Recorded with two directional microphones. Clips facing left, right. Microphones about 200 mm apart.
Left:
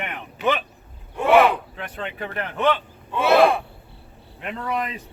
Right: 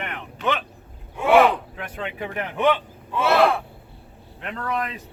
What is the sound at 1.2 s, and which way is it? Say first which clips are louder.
Vehicle: even; centre (ahead or behind).